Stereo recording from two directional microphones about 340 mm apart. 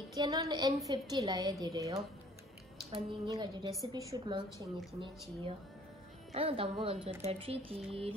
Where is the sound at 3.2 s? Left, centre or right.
Centre.